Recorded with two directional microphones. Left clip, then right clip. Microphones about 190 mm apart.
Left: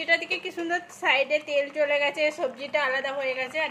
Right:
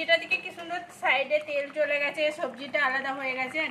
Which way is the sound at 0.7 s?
50° left (ahead or behind).